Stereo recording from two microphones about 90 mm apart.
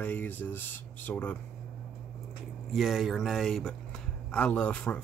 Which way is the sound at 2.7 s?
5° right (ahead or behind).